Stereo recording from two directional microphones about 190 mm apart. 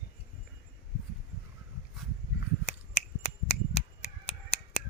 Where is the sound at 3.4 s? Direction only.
35° left (ahead or behind).